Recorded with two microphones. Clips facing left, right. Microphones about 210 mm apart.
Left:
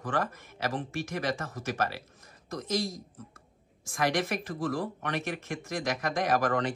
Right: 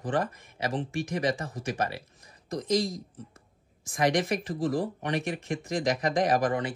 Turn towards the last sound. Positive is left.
turn(degrees=-15)  # may be behind; listen again after turning